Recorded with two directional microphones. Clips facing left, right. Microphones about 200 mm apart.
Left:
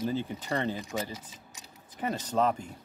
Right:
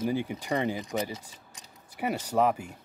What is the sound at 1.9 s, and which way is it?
Speech, 10° right (ahead or behind).